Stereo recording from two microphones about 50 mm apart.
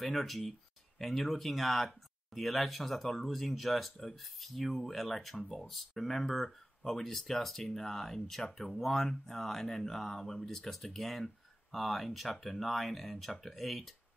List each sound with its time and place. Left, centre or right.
0.0 s speech: centre